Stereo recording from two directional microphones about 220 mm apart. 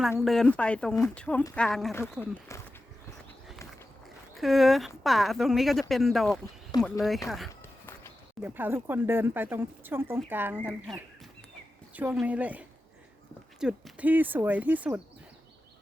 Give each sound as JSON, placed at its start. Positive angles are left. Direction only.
{"t": 0.2, "sound": "speech", "side_deg": 0}
{"t": 4.4, "sound": "speech", "side_deg": 0}
{"t": 6.7, "sound": "speech", "side_deg": 15}
{"t": 7.3, "sound": "speech", "side_deg": 0}